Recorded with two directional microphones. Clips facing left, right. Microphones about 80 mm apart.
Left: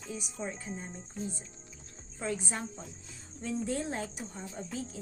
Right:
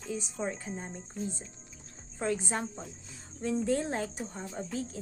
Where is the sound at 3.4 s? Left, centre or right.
Right.